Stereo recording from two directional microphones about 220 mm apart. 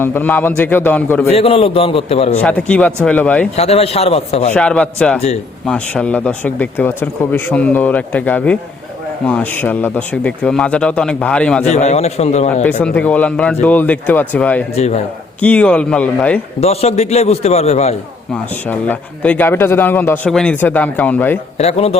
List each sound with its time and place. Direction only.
0.0 s speech: 10° left (ahead or behind)
1.3 s a man's voice: 25° left (ahead or behind)
2.4 s speech: 5° left (ahead or behind)
3.5 s a man's voice: 30° left (ahead or behind)
4.5 s speech: 5° left (ahead or behind)
11.6 s a man's voice: 30° left (ahead or behind)
12.8 s speech: 5° left (ahead or behind)
14.8 s a man's voice: 30° left (ahead or behind)
15.4 s speech: 5° left (ahead or behind)
16.6 s a man's voice: 30° left (ahead or behind)
18.6 s speech: 10° left (ahead or behind)
21.6 s a man's voice: 30° left (ahead or behind)